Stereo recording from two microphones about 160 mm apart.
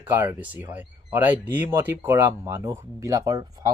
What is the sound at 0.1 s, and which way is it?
Speech, 15° right (ahead or behind).